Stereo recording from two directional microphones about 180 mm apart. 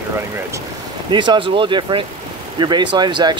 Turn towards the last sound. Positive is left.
turn(degrees=-25)  # may be behind; listen again after turning